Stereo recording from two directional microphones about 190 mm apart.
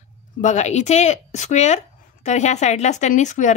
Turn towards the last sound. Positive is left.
turn(degrees=40)  # may be behind; listen again after turning